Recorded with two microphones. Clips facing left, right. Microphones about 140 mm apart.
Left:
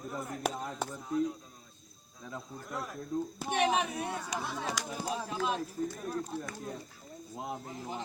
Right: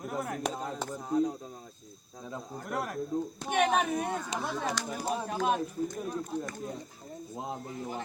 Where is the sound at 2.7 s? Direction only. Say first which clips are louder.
Right 5 dB; 70° right (ahead or behind).